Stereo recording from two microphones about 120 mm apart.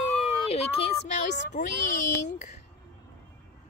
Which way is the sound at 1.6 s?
90° left.